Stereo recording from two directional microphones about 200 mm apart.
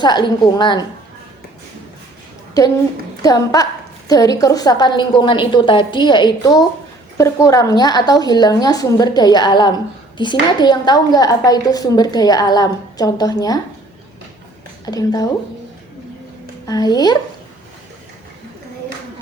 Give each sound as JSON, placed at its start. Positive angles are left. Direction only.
{"t": 0.0, "sound": "a woman's voice", "side_deg": 20}
{"t": 3.2, "sound": "a woman's voice", "side_deg": 20}
{"t": 14.8, "sound": "a woman's voice", "side_deg": 20}
{"t": 16.6, "sound": "a woman's voice", "side_deg": 20}